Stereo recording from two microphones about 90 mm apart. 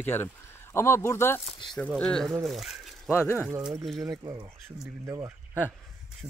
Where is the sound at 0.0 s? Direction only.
25° left (ahead or behind).